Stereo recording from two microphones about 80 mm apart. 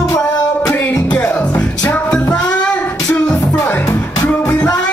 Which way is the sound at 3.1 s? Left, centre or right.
Centre.